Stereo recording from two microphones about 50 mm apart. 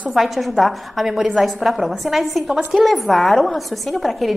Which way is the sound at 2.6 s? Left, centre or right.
Centre.